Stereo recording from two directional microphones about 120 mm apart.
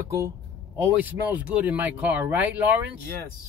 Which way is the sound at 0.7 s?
15° right (ahead or behind).